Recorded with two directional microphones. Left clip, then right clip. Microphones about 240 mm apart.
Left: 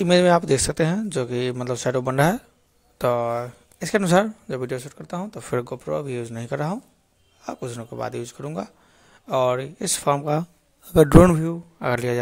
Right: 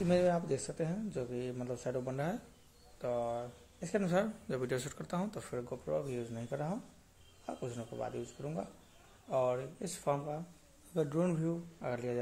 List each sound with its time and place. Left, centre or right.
0.0 s a man's voice: left
5.5 s a man's voice: left